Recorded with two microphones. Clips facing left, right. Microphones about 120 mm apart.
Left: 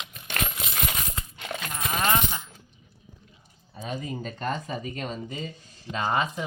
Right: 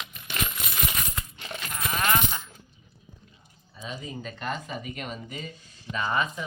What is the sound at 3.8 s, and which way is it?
Speech, 45° left (ahead or behind).